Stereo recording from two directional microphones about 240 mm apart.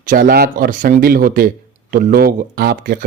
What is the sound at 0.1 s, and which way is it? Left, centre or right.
Speech, right.